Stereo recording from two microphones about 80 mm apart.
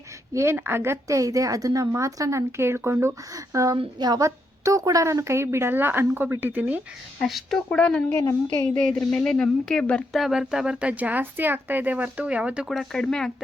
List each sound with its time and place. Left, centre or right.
0.3 s a woman's voice: right
3.5 s a woman's voice: right; by 6.8 s centre
7.2 s speech: centre
7.7 s speech: centre
10.1 s speech: centre
12.6 s speech: centre